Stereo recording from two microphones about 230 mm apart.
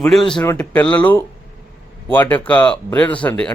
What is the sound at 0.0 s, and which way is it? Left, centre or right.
A man's voice, centre.